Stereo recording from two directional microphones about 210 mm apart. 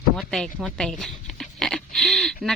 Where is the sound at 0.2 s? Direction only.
Centre (ahead or behind).